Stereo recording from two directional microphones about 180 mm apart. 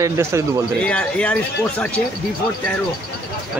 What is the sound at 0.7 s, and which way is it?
Speech, 5° left (ahead or behind).